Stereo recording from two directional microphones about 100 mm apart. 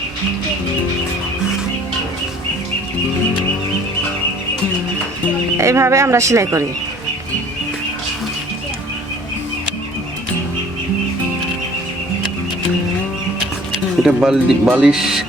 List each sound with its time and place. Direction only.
5.5 s speech: 30° right (ahead or behind)
14.0 s speech: 10° right (ahead or behind)